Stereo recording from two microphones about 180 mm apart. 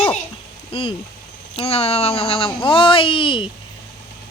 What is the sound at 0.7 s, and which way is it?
Speech, 30° left (ahead or behind).